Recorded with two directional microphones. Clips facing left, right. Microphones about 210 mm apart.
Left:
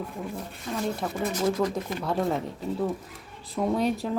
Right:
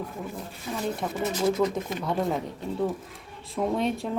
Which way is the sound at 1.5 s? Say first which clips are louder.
Right 2 dB; 25° right (ahead or behind).